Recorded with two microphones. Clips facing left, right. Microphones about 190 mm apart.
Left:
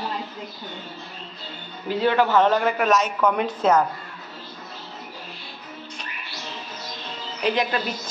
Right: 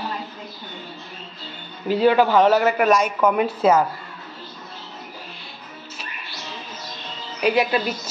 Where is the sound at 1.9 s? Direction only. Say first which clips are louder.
Right 3 dB; 15° right (ahead or behind).